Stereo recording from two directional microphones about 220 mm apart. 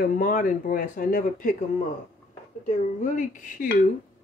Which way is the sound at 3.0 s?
35° left (ahead or behind).